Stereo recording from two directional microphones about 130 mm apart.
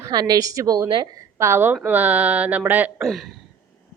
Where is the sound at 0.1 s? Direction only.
30° right (ahead or behind); by 3.1 s 15° right (ahead or behind).